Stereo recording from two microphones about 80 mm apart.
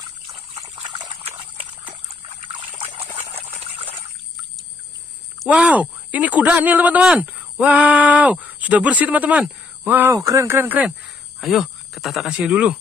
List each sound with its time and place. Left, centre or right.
0.8 s liquid: right
5.5 s speech: centre
10.1 s speech: right
11.4 s speech: centre
12.4 s speech: centre